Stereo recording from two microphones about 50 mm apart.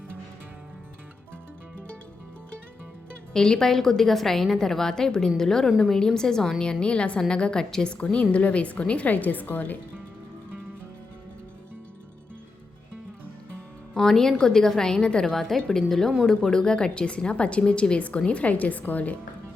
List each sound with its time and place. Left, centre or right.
3.3 s a woman's voice: centre
6.7 s a woman's voice: centre
7.9 s a woman's voice: left
9.1 s a woman's voice: left
13.9 s a woman's voice: centre; by 19.1 s left